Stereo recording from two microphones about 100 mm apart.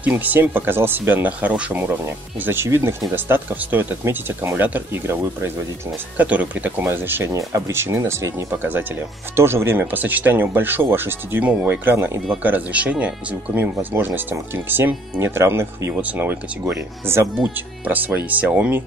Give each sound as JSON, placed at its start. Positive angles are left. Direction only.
{"t": 0.0, "sound": "speech", "side_deg": -15}
{"t": 6.1, "sound": "speech", "side_deg": -15}
{"t": 7.3, "sound": "speech", "side_deg": -35}
{"t": 15.9, "sound": "speech", "side_deg": -15}